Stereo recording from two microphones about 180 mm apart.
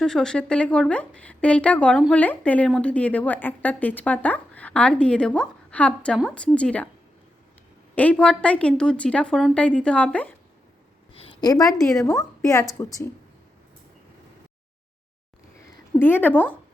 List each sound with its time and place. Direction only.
0.0 s a woman's voice: 5° left (ahead or behind)
7.9 s a woman's voice: 5° left (ahead or behind)
11.1 s a sound: 30° left (ahead or behind)
12.0 s a woman's voice: 15° left (ahead or behind)
16.0 s a woman's voice: 10° left (ahead or behind)